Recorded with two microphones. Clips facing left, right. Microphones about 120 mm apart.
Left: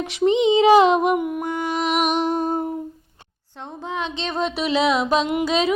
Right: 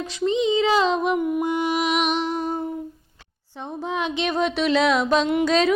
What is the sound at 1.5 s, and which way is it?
Speech, 15° right (ahead or behind).